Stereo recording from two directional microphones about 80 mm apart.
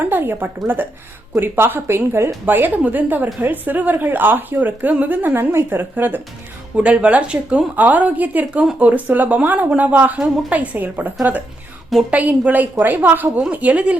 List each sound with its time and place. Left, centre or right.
0.0 s a woman's voice: right